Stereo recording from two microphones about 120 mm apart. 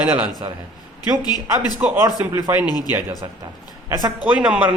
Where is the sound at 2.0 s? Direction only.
25° right (ahead or behind).